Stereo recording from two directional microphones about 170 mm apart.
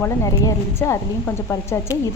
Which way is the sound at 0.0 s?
15° left (ahead or behind).